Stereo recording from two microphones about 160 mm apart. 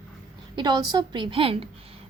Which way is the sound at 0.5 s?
25° right (ahead or behind).